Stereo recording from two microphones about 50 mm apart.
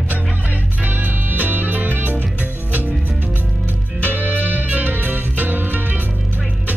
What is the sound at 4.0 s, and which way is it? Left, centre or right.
Music, right.